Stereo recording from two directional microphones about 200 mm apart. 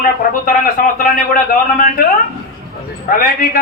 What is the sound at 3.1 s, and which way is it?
Speech, 45° left (ahead or behind).